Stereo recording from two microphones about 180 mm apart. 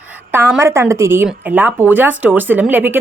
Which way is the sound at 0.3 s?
10° right (ahead or behind).